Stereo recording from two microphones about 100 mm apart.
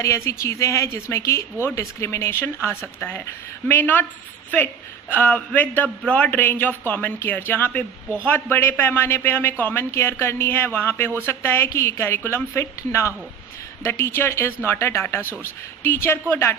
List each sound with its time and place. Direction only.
0.0 s a man's voice: 30° left (ahead or behind)